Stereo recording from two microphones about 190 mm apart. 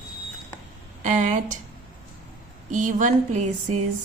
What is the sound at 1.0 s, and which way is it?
Speech, 40° right (ahead or behind).